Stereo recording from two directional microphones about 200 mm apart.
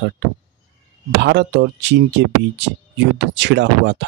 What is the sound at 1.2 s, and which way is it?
Speech, 60° right (ahead or behind).